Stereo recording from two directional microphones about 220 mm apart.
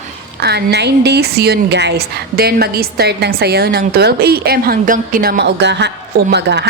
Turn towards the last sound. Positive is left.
turn(degrees=-50)  # may be behind; listen again after turning